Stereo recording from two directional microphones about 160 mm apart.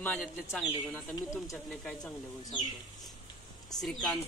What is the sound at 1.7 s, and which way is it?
Speech, 5° left (ahead or behind).